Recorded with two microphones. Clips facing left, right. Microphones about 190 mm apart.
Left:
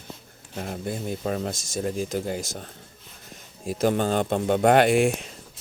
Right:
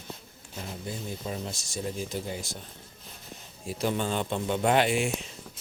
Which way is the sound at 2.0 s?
50° left (ahead or behind).